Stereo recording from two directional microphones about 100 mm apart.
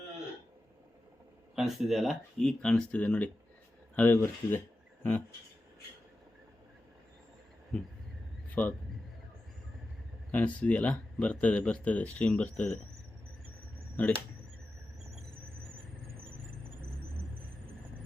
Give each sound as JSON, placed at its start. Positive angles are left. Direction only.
{"t": 1.5, "sound": "speech", "side_deg": -5}
{"t": 7.7, "sound": "speech", "side_deg": 10}
{"t": 10.3, "sound": "speech", "side_deg": 15}
{"t": 14.0, "sound": "speech", "side_deg": 15}